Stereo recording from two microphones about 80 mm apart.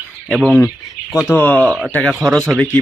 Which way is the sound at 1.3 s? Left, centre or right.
Left.